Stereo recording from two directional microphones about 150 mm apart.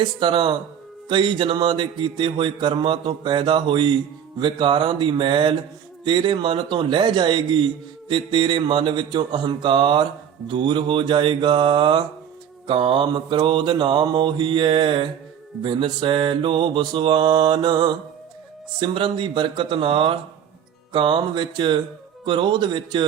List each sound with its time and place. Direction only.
0.0 s a man's voice: 30° right (ahead or behind)